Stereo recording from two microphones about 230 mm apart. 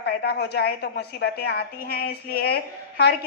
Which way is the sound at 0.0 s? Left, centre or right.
Left.